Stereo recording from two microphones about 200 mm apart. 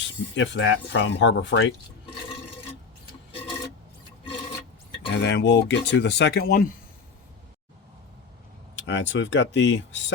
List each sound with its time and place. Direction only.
0.3 s speech: 65° left (ahead or behind)
5.1 s speech: 55° left (ahead or behind)
8.9 s speech: 65° left (ahead or behind)